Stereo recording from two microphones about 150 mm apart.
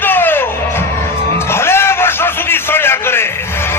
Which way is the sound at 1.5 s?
15° left (ahead or behind).